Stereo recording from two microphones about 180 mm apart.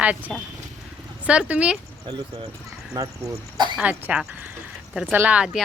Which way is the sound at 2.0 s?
25° right (ahead or behind).